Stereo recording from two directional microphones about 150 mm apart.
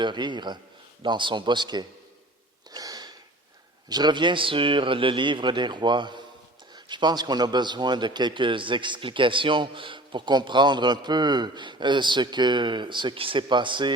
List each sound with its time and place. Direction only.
0.0 s a man's voice: 30° right (ahead or behind)
2.7 s sniff: 25° right (ahead or behind)
3.8 s a man's voice: 25° right (ahead or behind)